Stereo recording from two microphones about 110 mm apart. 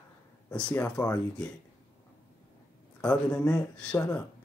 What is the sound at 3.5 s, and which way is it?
Speech, 10° left (ahead or behind).